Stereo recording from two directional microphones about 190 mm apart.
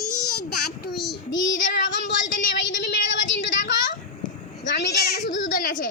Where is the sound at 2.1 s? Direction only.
75° left (ahead or behind).